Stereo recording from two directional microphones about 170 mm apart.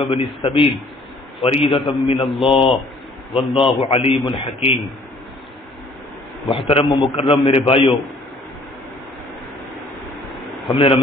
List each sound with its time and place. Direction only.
0.0 s a man's voice: 30° left (ahead or behind)
6.5 s a man's voice: 30° left (ahead or behind)
10.7 s a man's voice: 30° left (ahead or behind)